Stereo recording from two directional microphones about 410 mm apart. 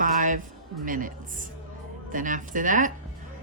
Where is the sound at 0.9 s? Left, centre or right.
Centre.